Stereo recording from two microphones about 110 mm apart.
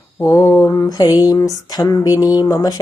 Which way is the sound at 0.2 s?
25° left (ahead or behind).